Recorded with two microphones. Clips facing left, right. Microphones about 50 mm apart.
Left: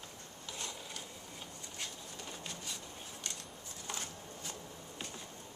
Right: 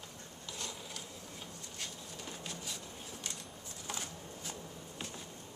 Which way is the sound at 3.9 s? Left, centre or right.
Centre.